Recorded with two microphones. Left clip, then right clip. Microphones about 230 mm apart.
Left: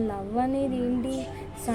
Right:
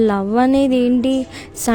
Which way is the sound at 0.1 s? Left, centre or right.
Right.